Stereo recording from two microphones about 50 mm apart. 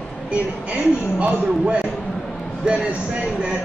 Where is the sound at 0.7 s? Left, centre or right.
Right.